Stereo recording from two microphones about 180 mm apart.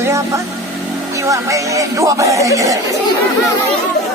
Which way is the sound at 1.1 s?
15° right (ahead or behind).